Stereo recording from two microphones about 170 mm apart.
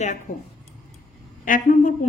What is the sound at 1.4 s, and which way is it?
Speech, 50° left (ahead or behind).